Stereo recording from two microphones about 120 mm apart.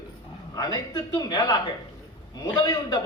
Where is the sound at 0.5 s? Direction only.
35° left (ahead or behind).